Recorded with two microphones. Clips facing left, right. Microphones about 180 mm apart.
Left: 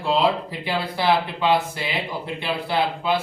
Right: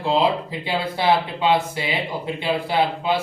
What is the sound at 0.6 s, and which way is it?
Speech, 20° right (ahead or behind).